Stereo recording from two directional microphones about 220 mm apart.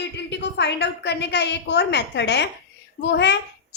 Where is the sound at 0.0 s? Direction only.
50° left (ahead or behind).